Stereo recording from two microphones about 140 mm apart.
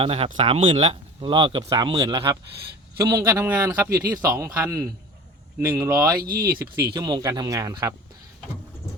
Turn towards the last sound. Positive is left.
turn(degrees=-25)  # may be behind; listen again after turning